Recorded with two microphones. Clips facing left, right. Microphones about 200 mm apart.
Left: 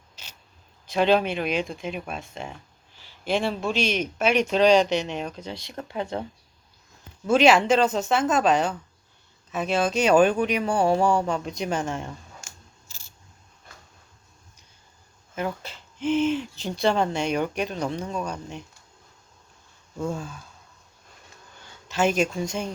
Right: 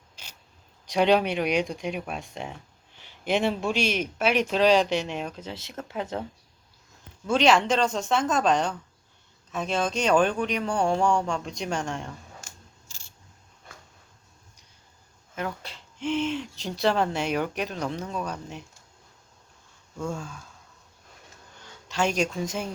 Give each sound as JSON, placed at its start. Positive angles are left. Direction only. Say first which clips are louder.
{"t": 0.9, "sound": "speech", "louder": "even", "side_deg": -15}
{"t": 7.3, "sound": "speech", "louder": "left 3 dB", "side_deg": 10}
{"t": 12.9, "sound": "a sound", "louder": "left 1 dB", "side_deg": 5}
{"t": 15.4, "sound": "speech", "louder": "left 3 dB", "side_deg": 5}
{"t": 21.8, "sound": "speech", "louder": "left 3 dB", "side_deg": 5}